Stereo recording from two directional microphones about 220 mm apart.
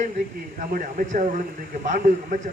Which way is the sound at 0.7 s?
35° right (ahead or behind).